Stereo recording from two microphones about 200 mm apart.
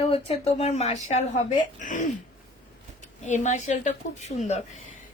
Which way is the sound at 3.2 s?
35° left (ahead or behind).